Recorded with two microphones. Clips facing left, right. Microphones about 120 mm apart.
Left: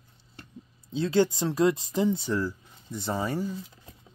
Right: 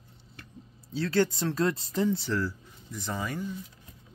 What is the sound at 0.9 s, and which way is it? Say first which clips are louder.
Speech: left 2 dB; 20° left (ahead or behind).